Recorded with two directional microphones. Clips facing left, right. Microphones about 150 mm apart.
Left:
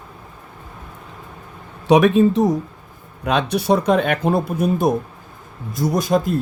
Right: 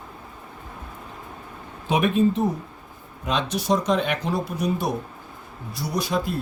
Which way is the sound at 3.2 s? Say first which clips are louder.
Left 6 dB; 60° left (ahead or behind).